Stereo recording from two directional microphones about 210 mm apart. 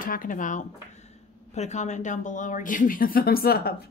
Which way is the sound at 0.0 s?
40° left (ahead or behind).